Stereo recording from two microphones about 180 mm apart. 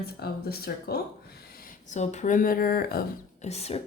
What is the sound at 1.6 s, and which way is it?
Speech, 40° left (ahead or behind).